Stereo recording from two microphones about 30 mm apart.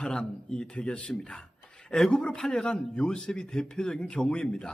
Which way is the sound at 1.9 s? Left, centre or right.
Centre.